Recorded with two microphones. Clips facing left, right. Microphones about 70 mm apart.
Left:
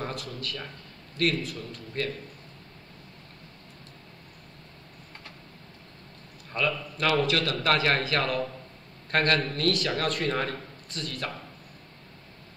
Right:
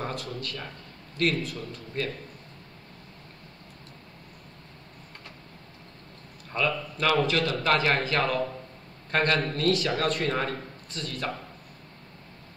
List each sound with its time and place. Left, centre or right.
0.0 s a man's voice: centre
6.5 s a man's voice: centre